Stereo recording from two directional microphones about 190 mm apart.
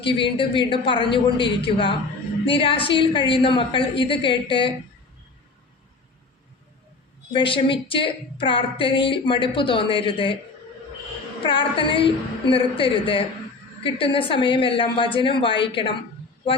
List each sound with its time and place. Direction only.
0.0 s speech: 25° left (ahead or behind)
7.3 s speech: 25° left (ahead or behind)
11.4 s speech: 25° left (ahead or behind)